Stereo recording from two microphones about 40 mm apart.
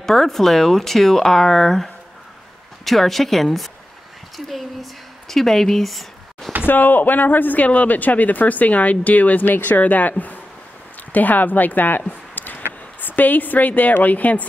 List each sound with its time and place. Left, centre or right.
0.0 s a woman's voice: centre
6.6 s speech: left
12.1 s a sound: left
13.0 s speech: left